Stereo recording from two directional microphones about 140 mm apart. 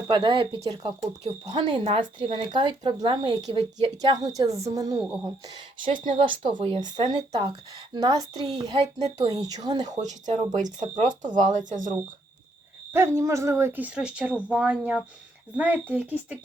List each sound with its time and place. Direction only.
0.1 s speech: 30° right (ahead or behind)
9.9 s speech: 60° right (ahead or behind)
12.9 s speech: 20° right (ahead or behind)